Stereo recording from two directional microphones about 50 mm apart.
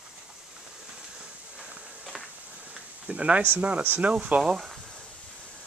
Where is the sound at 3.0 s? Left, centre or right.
Right.